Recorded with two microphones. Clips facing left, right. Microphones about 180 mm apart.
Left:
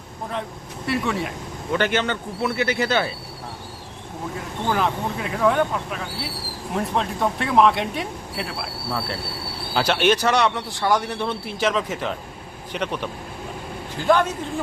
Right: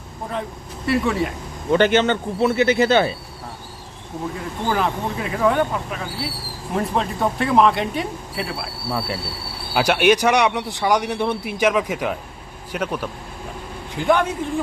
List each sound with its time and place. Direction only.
0.9 s speech: centre (ahead or behind)
1.7 s speech: 25° right (ahead or behind)
4.7 s speech: centre (ahead or behind)
8.9 s speech: 10° right (ahead or behind)